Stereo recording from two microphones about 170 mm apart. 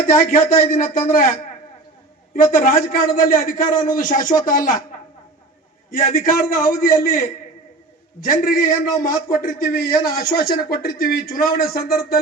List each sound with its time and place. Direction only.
0.1 s a man's voice: 55° left (ahead or behind)
2.3 s a man's voice: 55° left (ahead or behind)
5.9 s a man's voice: 55° left (ahead or behind)